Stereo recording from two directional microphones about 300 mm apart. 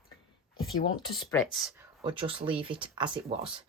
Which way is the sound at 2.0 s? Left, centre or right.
Centre.